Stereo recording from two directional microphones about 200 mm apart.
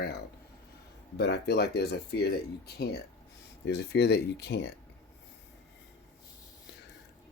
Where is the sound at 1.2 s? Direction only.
55° left (ahead or behind).